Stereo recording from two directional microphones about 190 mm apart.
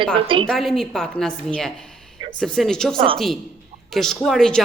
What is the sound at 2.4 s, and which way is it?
A woman's voice, 5° left (ahead or behind).